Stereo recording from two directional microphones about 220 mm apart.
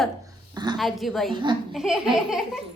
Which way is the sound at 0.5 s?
20° right (ahead or behind).